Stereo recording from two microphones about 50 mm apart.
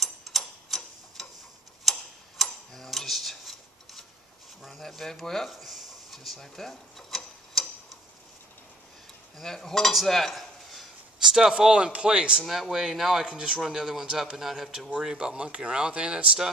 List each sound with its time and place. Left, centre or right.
0.0 s tick-tock: centre
4.6 s speech: centre
5.5 s a sound: centre
9.4 s speech: centre
11.1 s speech: centre
12.4 s speech: centre